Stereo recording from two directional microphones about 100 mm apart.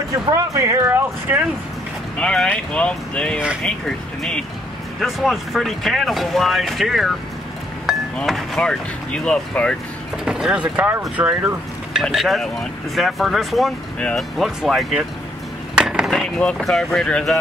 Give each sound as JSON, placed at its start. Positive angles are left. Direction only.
{"t": 0.5, "sound": "speech", "side_deg": -30}
{"t": 2.1, "sound": "speech", "side_deg": 10}
{"t": 8.2, "sound": "speech", "side_deg": 5}
{"t": 10.1, "sound": "speech", "side_deg": -5}
{"t": 12.0, "sound": "speech", "side_deg": 0}
{"t": 13.9, "sound": "speech", "side_deg": 10}
{"t": 14.4, "sound": "speech", "side_deg": 0}
{"t": 15.8, "sound": "cutlery", "side_deg": -5}
{"t": 16.5, "sound": "speech", "side_deg": 5}